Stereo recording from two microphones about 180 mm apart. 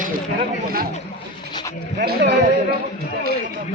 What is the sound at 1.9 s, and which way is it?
Music, 65° right (ahead or behind).